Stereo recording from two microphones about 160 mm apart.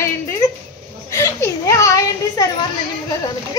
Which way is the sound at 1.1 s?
20° left (ahead or behind).